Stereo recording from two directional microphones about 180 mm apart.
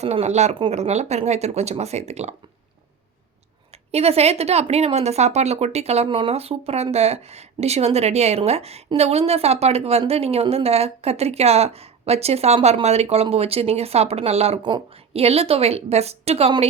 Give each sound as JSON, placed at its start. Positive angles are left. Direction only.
{"t": 0.0, "sound": "speech", "side_deg": -35}
{"t": 3.9, "sound": "speech", "side_deg": -35}